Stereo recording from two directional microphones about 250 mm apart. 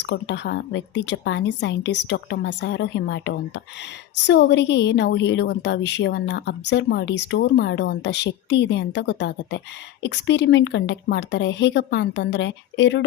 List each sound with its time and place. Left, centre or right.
0.1 s a woman's voice: left